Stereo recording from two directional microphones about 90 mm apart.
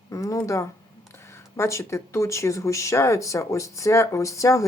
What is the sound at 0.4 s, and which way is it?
Speech, 35° left (ahead or behind).